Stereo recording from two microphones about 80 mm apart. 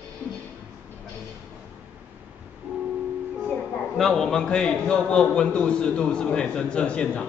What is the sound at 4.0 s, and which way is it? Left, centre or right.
A man's voice, centre.